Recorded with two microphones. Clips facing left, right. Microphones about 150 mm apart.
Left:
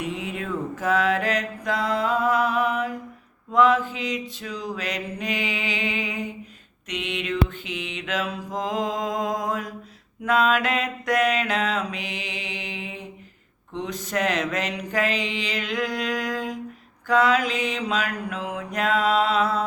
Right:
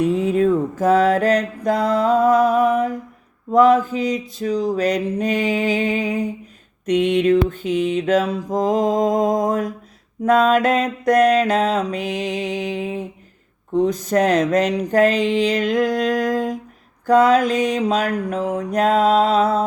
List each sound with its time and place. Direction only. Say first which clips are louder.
0.0 s mantra: right 13 dB; 40° right (ahead or behind)